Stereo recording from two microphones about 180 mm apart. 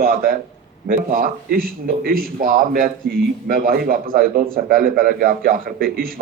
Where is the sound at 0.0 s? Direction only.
50° right (ahead or behind).